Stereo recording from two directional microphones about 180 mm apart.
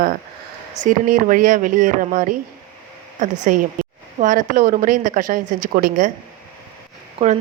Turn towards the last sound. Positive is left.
turn(degrees=-40)  # may be behind; listen again after turning